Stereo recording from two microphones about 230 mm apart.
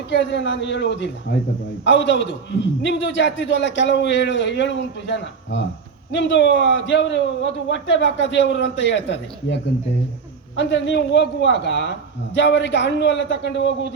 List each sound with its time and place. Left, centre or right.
0.1 s a man's voice: left